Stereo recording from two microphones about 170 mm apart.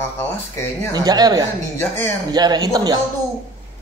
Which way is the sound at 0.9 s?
25° right (ahead or behind).